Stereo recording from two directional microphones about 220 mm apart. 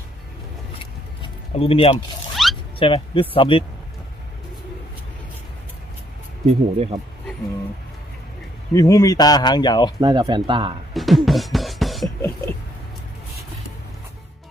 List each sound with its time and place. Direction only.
1.2 s speech: 25° left (ahead or behind)
2.3 s zipper: centre (ahead or behind)
2.7 s speech: 25° left (ahead or behind)
6.5 s speech: 30° right (ahead or behind)
8.7 s speech: 15° left (ahead or behind)
10.0 s speech: 20° right (ahead or behind)
10.9 s beatboxing: centre (ahead or behind)